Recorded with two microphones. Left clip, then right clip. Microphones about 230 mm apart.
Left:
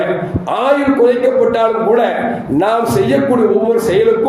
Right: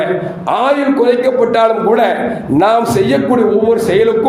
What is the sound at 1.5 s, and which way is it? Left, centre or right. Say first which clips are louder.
A man's voice: right 2 dB; right.